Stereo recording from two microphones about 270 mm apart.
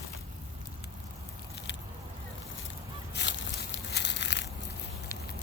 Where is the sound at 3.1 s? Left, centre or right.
Left.